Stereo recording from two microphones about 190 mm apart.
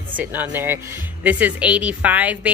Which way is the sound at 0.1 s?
10° right (ahead or behind).